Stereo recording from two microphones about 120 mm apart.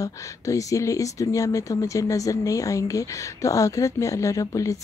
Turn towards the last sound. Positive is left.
turn(degrees=30)  # may be behind; listen again after turning